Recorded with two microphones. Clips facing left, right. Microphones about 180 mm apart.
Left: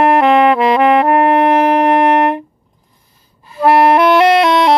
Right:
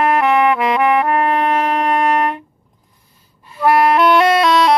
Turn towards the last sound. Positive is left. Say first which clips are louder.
# left 3 dB
turn(degrees=25)  # may be behind; listen again after turning